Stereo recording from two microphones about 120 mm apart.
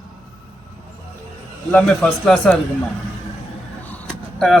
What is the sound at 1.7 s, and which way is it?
Speech, 5° left (ahead or behind).